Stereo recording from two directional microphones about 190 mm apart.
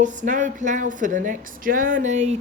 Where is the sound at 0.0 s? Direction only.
40° right (ahead or behind).